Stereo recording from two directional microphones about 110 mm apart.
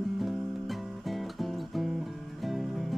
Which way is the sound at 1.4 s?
Centre (ahead or behind).